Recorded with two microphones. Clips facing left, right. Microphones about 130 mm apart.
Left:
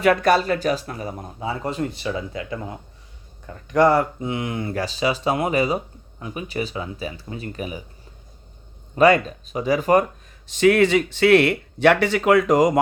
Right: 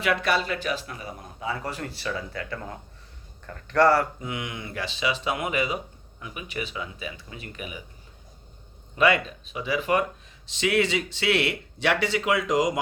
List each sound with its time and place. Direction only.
0.0 s speech: 45° left (ahead or behind)
9.0 s speech: 40° left (ahead or behind)